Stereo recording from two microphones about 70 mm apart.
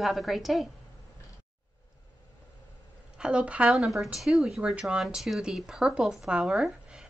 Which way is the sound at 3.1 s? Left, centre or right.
Centre.